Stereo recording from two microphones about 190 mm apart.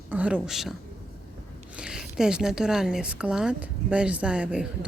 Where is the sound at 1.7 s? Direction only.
5° right (ahead or behind).